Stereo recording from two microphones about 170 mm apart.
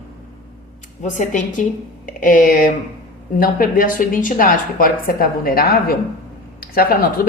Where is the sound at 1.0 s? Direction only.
45° left (ahead or behind).